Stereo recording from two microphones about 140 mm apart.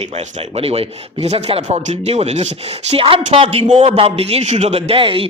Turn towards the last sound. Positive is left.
turn(degrees=-40)  # may be behind; listen again after turning